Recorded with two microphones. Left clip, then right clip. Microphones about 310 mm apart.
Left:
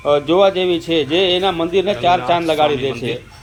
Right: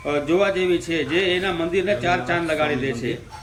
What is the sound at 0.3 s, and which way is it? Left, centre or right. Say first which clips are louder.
Speech: left 2 dB; centre.